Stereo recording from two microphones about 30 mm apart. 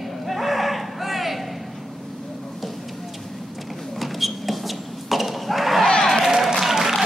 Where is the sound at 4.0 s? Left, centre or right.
Centre.